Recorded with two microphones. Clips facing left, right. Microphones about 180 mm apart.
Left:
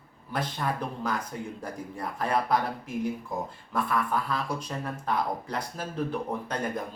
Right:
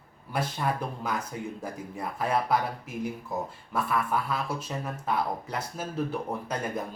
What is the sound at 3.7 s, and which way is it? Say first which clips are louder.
Speech: even; 5° right (ahead or behind).